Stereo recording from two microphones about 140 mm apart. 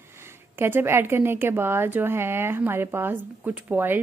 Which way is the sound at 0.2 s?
15° right (ahead or behind).